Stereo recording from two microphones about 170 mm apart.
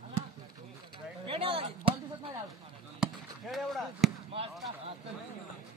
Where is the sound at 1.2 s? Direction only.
35° right (ahead or behind).